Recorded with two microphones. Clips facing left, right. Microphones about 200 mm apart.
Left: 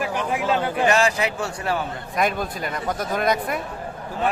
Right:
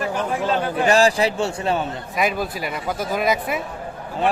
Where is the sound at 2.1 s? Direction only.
5° right (ahead or behind).